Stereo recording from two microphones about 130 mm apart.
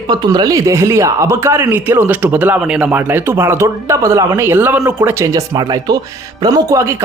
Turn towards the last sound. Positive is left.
turn(degrees=-20)  # may be behind; listen again after turning